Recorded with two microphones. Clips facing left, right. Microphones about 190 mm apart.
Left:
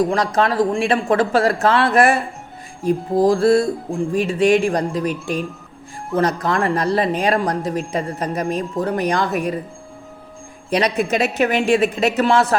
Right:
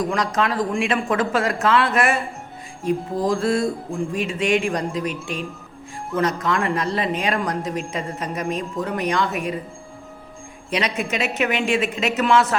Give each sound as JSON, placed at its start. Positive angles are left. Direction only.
{"t": 0.0, "sound": "speech", "side_deg": 35}
{"t": 3.2, "sound": "speech", "side_deg": 35}
{"t": 6.1, "sound": "speech", "side_deg": 35}
{"t": 10.7, "sound": "speech", "side_deg": 35}